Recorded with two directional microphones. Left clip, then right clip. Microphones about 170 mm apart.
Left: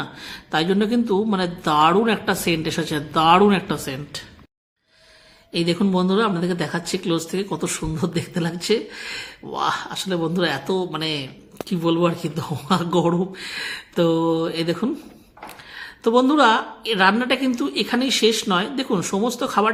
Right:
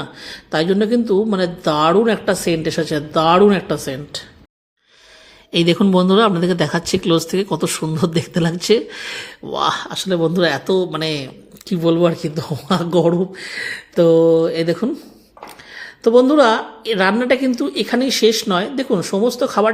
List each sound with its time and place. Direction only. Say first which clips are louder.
0.0 s a man's voice: right 2 dB; 15° right (ahead or behind)
5.5 s a man's voice: right 6 dB; 40° right (ahead or behind); by 19.7 s 15° right (ahead or behind)